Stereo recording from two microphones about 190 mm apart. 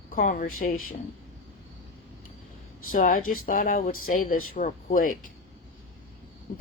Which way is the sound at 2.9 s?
45° left (ahead or behind).